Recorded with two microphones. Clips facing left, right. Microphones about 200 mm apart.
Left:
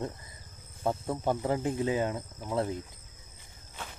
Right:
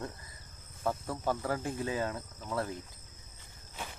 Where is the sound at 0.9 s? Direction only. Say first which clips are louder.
Left 3 dB; 20° left (ahead or behind).